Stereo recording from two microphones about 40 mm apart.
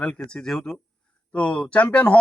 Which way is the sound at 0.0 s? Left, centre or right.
Left.